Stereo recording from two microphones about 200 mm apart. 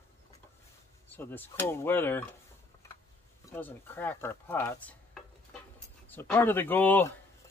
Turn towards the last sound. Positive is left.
turn(degrees=10)  # may be behind; listen again after turning